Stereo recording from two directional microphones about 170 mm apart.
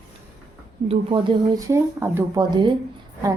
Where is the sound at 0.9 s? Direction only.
30° right (ahead or behind); by 2.4 s 15° right (ahead or behind).